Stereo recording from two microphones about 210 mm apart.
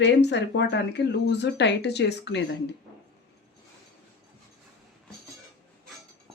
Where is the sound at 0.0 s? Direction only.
55° left (ahead or behind).